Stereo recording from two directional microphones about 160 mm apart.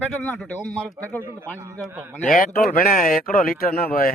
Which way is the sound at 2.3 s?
55° left (ahead or behind).